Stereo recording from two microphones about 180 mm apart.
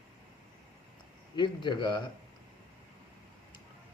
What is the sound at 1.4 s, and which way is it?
Speech, 25° left (ahead or behind).